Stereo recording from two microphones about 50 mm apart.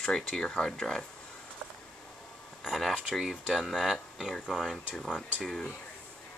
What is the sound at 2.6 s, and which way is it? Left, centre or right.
Speech, centre.